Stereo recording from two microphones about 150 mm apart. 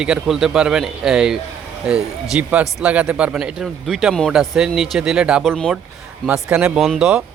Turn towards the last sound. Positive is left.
turn(degrees=-5)  # may be behind; listen again after turning